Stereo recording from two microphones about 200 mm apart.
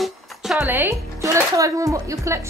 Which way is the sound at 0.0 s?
Centre (ahead or behind).